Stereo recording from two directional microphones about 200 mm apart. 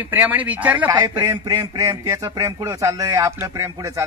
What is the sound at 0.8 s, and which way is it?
Speech, 20° right (ahead or behind).